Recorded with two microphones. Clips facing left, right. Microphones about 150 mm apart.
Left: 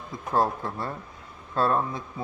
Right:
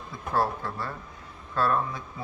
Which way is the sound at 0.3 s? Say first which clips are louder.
Left 2 dB; 20° left (ahead or behind).